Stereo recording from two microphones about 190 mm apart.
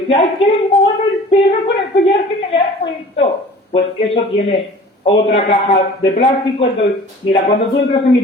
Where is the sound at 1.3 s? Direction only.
30° left (ahead or behind).